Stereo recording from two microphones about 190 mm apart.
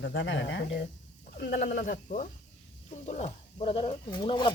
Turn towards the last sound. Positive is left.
turn(degrees=25)  # may be behind; listen again after turning